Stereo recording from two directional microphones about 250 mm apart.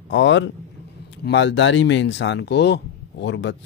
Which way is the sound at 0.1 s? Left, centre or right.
Left.